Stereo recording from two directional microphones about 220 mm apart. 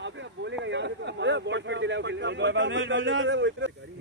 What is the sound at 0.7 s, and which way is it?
Speech, 55° right (ahead or behind).